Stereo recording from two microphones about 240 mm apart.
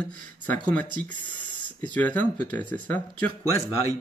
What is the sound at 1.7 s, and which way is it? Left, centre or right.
Speech, centre.